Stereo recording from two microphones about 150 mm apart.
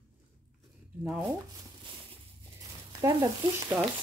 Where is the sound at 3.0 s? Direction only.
20° right (ahead or behind).